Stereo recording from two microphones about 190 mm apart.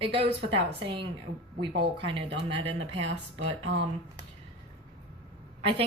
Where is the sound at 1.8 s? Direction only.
25° right (ahead or behind).